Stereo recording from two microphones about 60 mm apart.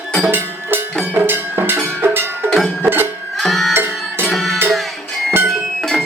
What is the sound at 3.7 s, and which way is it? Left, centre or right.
Music, right.